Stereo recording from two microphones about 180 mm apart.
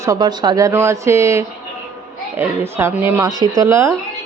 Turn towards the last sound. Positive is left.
turn(degrees=-15)  # may be behind; listen again after turning